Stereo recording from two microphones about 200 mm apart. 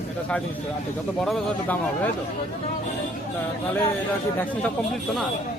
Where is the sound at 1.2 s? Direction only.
5° left (ahead or behind).